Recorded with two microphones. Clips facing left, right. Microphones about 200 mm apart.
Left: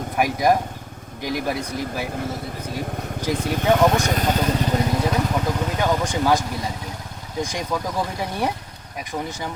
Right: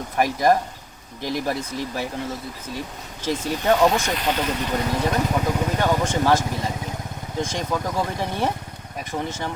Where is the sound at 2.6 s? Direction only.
55° left (ahead or behind).